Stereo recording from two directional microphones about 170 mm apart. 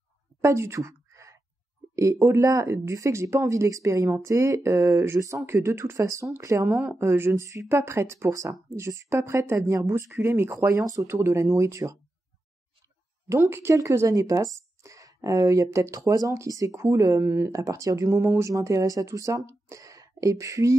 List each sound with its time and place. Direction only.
0.4 s a sound: 15° right (ahead or behind)
2.0 s speech: 15° right (ahead or behind)
13.3 s speech: 15° right (ahead or behind)